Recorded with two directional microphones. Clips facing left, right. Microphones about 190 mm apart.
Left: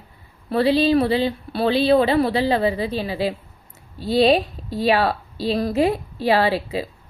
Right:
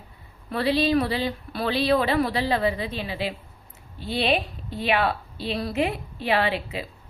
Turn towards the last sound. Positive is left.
turn(degrees=35)  # may be behind; listen again after turning